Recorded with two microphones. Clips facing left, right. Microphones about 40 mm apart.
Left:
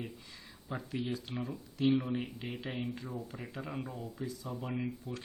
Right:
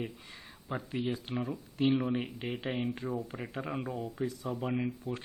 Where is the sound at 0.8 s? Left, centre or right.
Right.